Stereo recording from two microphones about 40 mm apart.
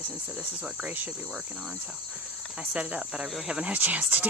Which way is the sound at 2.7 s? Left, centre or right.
Right.